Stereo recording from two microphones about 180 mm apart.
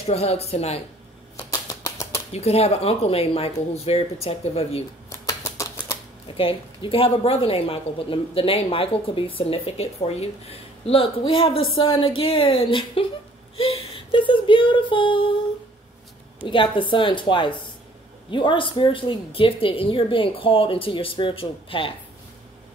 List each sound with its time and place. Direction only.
0.0 s a woman's voice: 35° left (ahead or behind)
1.5 s a sound: 20° left (ahead or behind)
2.3 s a woman's voice: 35° left (ahead or behind)
5.1 s typewriter: 15° left (ahead or behind)
6.2 s a woman's voice: 30° left (ahead or behind)
16.3 s a woman's voice: 30° left (ahead or behind)